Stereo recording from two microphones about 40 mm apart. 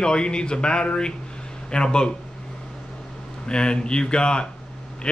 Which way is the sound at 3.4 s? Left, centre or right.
Left.